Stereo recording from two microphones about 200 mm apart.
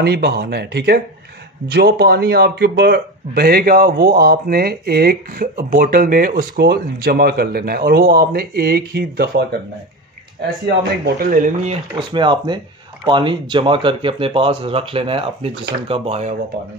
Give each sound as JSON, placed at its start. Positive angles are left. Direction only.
{"t": 0.0, "sound": "speech", "side_deg": -55}
{"t": 10.8, "sound": "speech", "side_deg": -45}
{"t": 11.7, "sound": "speech", "side_deg": -25}